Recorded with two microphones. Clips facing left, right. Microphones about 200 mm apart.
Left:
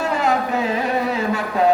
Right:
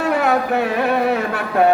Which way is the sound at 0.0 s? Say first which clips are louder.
Right 2 dB; 60° right (ahead or behind).